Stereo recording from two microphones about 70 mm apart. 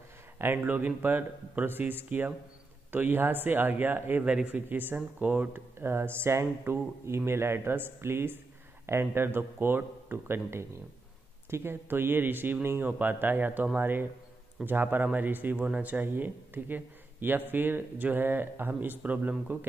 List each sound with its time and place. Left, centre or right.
0.4 s speech: right
4.3 s speech: centre
5.8 s speech: right